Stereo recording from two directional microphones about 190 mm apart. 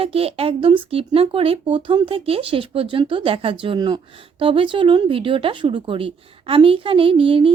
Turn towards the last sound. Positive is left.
turn(degrees=-30)  # may be behind; listen again after turning